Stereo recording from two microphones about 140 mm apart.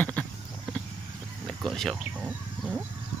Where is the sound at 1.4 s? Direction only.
Centre (ahead or behind).